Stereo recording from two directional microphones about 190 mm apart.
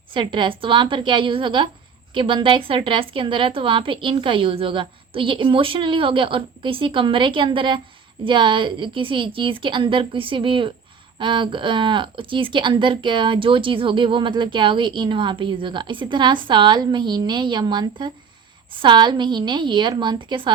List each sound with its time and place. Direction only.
0.1 s speech: 25° right (ahead or behind)